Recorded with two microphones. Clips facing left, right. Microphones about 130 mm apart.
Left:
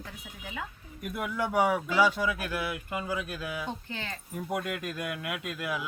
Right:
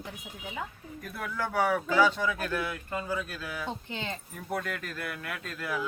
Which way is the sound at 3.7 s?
20° right (ahead or behind).